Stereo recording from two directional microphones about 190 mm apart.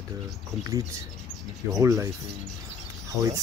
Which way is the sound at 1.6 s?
15° right (ahead or behind).